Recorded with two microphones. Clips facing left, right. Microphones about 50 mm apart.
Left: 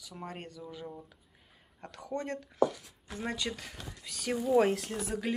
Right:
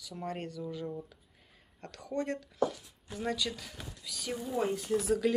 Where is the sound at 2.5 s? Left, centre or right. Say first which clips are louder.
Left 6 dB; left.